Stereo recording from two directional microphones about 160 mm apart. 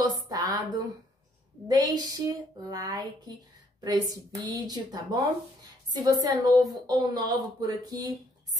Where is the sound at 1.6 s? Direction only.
25° right (ahead or behind).